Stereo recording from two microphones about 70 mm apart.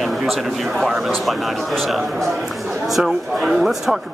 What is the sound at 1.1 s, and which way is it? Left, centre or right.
Speech, centre.